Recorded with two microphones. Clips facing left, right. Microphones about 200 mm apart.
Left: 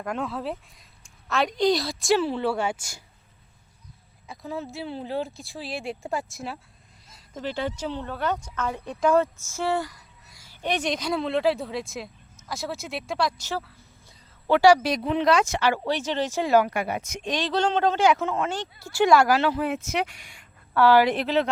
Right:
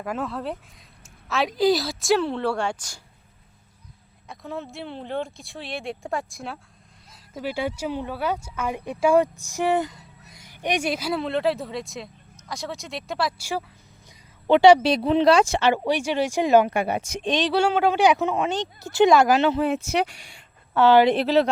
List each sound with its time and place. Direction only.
0.0 s a woman's voice: 5° right (ahead or behind)
4.3 s a woman's voice: centre (ahead or behind)
7.1 s speech: 10° right (ahead or behind)
14.4 s speech: 20° right (ahead or behind)
17.5 s speech: 10° right (ahead or behind); by 21.5 s 35° right (ahead or behind)